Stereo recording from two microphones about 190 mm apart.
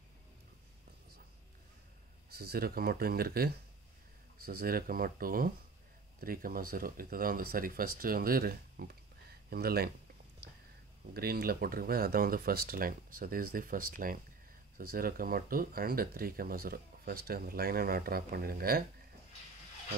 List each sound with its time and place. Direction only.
2.2 s speech: 55° right (ahead or behind)
10.4 s a sound: 55° right (ahead or behind)
11.1 s speech: 55° right (ahead or behind)